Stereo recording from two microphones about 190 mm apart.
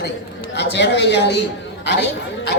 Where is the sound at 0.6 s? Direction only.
65° left (ahead or behind).